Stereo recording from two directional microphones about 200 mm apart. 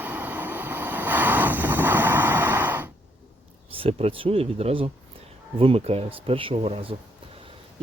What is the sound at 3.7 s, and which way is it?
Speech, 30° right (ahead or behind).